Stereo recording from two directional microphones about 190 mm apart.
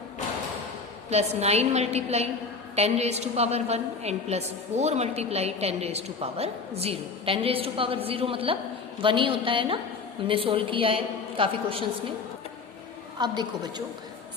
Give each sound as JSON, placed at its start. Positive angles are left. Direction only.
{"t": 1.1, "sound": "a woman's voice", "side_deg": -35}
{"t": 13.1, "sound": "a woman's voice", "side_deg": -20}